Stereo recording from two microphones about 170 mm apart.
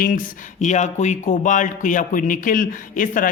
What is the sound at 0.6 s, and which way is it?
A man's voice, 45° left (ahead or behind).